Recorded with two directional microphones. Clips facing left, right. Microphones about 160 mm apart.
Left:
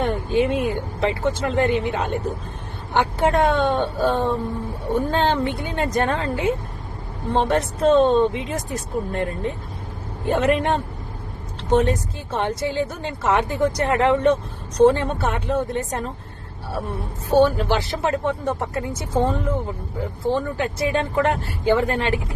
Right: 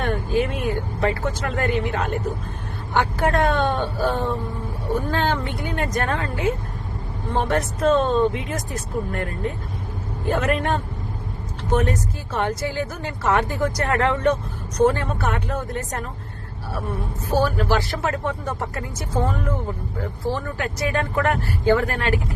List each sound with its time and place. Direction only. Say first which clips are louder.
0.0 s speech: left 2 dB; 25° left (ahead or behind)
17.3 s speech: left 4 dB; 25° left (ahead or behind)